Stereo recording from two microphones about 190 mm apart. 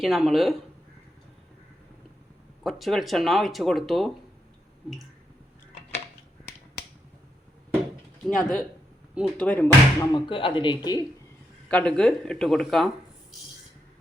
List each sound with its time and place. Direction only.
0.0 s speech: centre (ahead or behind)
2.6 s speech: centre (ahead or behind)
8.3 s speech: 5° left (ahead or behind)
10.2 s speech: 25° left (ahead or behind)
11.7 s speech: 5° left (ahead or behind)